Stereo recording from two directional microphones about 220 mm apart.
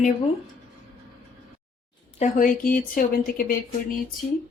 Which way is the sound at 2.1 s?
35° left (ahead or behind).